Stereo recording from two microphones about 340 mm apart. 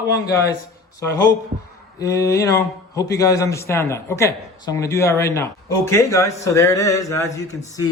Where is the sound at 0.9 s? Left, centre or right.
Centre.